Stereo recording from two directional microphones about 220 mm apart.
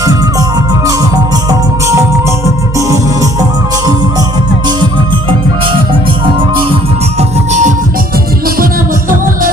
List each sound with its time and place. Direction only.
0.0 s music: 15° right (ahead or behind)
5.9 s music: 25° right (ahead or behind); by 9.5 s 40° right (ahead or behind)